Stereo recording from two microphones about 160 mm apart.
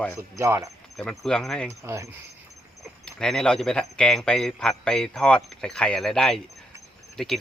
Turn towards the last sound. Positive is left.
turn(degrees=0)  # may be behind; listen again after turning